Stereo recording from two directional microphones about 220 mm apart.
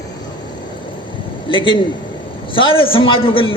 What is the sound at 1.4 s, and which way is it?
A man's voice, 20° left (ahead or behind).